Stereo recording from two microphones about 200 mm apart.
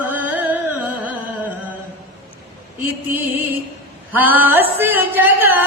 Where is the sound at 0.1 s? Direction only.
10° right (ahead or behind).